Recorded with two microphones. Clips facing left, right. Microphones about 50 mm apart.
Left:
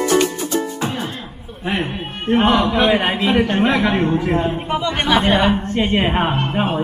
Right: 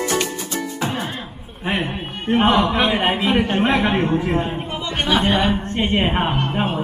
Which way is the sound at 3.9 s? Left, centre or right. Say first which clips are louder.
Left 2 dB; centre.